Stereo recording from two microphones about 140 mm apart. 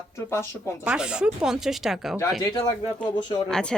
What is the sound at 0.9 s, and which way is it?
Speech, 5° right (ahead or behind).